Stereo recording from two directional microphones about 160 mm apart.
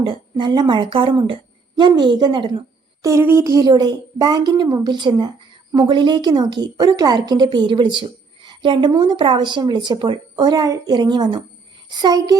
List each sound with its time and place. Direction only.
0.1 s a woman's voice: 30° right (ahead or behind)
3.0 s a woman's voice: 15° right (ahead or behind)